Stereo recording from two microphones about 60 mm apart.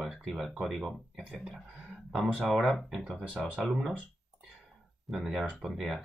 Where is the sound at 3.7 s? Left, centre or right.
Centre.